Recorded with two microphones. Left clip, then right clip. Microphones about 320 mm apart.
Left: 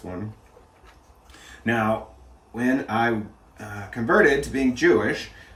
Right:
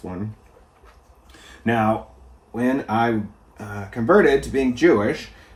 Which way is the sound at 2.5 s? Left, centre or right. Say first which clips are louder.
Right 2 dB; centre.